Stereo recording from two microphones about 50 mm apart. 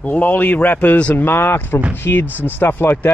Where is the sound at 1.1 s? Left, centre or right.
Left.